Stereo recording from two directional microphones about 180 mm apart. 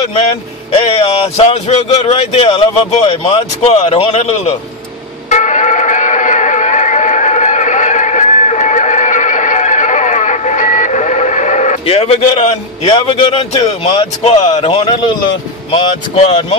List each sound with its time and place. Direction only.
0.1 s speech: 35° left (ahead or behind)
5.3 s a sound: 45° left (ahead or behind)
14.5 s a man's voice: 30° left (ahead or behind)